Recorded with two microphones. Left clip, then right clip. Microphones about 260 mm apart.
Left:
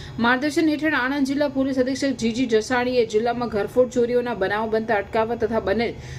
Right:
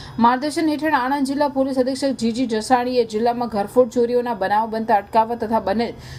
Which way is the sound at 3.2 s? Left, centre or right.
Right.